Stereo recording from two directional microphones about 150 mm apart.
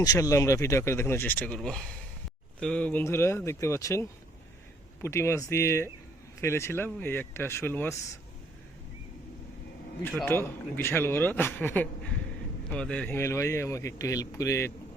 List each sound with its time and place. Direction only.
0.0 s a man's voice: 25° left (ahead or behind)
5.0 s a man's voice: 20° left (ahead or behind)
10.2 s a man's voice: 15° left (ahead or behind)